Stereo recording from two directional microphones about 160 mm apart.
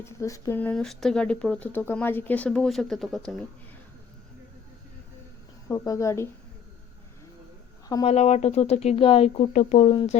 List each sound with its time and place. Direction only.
0.0 s speech: 20° left (ahead or behind); by 3.3 s centre (ahead or behind)
5.6 s speech: 20° left (ahead or behind)
8.0 s speech: 45° left (ahead or behind)